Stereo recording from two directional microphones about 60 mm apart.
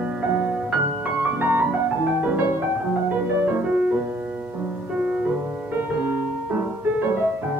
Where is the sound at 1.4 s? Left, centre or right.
Right.